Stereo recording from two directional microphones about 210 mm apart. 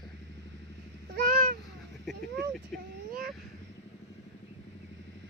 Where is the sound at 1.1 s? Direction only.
45° right (ahead or behind).